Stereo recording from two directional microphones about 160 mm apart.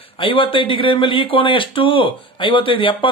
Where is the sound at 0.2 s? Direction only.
35° left (ahead or behind).